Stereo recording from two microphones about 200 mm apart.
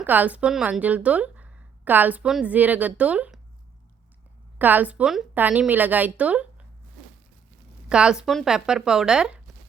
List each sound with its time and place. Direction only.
0.0 s speech: 10° right (ahead or behind)
4.5 s a woman's voice: 10° right (ahead or behind)
7.9 s speech: 5° right (ahead or behind)